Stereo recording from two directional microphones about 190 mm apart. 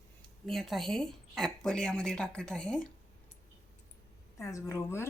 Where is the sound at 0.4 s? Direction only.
Centre (ahead or behind).